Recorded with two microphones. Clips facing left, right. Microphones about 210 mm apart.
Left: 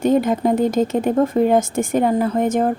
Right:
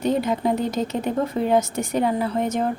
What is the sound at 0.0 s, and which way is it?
Speech, 50° left (ahead or behind).